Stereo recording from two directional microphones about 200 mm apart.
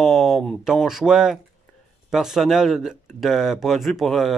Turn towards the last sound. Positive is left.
turn(degrees=0)  # may be behind; listen again after turning